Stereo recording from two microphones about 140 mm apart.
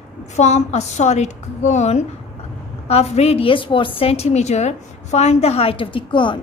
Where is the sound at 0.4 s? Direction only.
55° left (ahead or behind).